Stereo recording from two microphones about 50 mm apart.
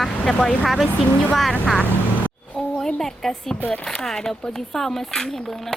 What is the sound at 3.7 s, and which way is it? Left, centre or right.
Speech, left.